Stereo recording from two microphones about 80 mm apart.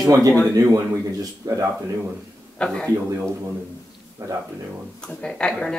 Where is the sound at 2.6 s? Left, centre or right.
Centre.